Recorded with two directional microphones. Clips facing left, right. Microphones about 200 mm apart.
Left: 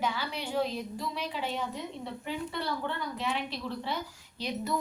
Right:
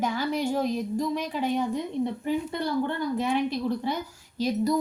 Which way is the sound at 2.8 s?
45° right (ahead or behind).